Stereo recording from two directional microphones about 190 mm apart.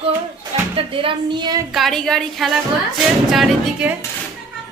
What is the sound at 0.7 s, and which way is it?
Speech, 30° right (ahead or behind).